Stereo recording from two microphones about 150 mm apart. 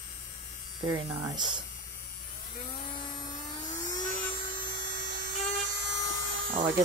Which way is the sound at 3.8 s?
25° left (ahead or behind).